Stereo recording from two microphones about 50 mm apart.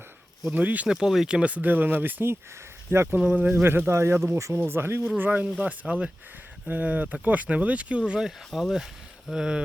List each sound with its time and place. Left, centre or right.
0.5 s speech: right
0.9 s speech: centre
1.3 s speech: right
2.9 s speech: right
3.2 s speech: right
3.5 s speech: right
4.3 s speech: right
4.6 s speech: right
5.1 s speech: right
5.8 s speech: right
6.7 s speech: right; by 8.3 s centre
8.5 s speech: centre